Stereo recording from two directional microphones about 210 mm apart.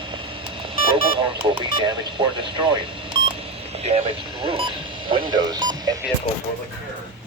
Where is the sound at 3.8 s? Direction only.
30° right (ahead or behind).